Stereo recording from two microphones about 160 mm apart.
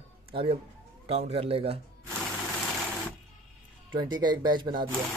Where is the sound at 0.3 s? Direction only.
30° right (ahead or behind).